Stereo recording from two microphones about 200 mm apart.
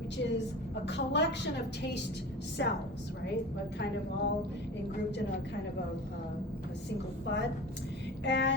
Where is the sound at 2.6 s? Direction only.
60° left (ahead or behind).